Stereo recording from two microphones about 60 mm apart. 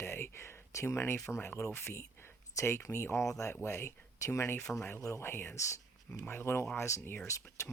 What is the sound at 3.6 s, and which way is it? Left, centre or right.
Speech, left.